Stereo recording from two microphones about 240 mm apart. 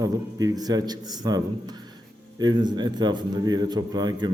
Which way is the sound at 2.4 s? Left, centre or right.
Centre.